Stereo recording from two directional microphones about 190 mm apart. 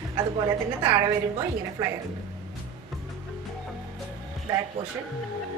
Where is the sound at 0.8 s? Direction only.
15° right (ahead or behind).